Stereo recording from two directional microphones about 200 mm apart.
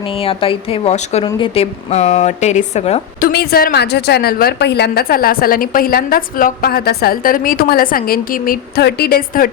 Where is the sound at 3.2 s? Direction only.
50° left (ahead or behind).